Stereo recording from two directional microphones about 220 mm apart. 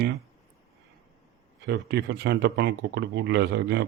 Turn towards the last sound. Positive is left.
turn(degrees=-50)  # may be behind; listen again after turning